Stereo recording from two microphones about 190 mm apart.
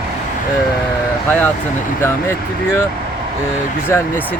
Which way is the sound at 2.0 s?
10° left (ahead or behind).